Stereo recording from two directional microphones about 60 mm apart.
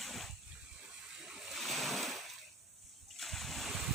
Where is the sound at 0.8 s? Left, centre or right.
Centre.